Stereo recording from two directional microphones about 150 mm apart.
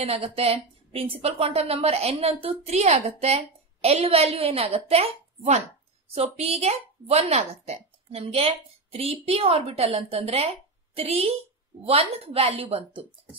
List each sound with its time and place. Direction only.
0.0 s a woman's voice: 40° right (ahead or behind)